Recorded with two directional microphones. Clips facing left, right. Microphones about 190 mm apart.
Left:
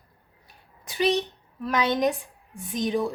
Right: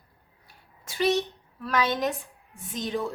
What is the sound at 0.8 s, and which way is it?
A woman's voice, 15° left (ahead or behind).